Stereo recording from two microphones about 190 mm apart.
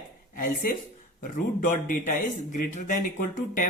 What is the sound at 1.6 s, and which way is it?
Speech, 45° left (ahead or behind).